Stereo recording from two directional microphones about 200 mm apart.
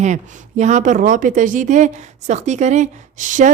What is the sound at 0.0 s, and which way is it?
A woman's voice, 35° right (ahead or behind).